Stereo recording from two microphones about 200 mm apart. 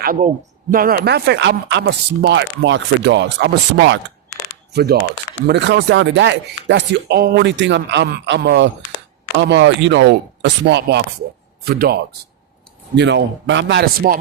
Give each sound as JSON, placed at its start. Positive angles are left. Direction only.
{"t": 0.0, "sound": "a man's voice", "side_deg": -45}
{"t": 13.0, "sound": "speech", "side_deg": -60}